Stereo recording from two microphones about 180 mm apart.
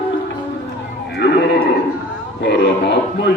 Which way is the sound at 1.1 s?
60° left (ahead or behind).